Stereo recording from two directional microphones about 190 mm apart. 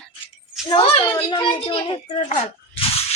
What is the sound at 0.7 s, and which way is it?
A woman's voice, 25° left (ahead or behind).